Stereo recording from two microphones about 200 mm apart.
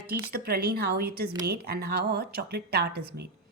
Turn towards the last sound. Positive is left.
turn(degrees=-55)  # may be behind; listen again after turning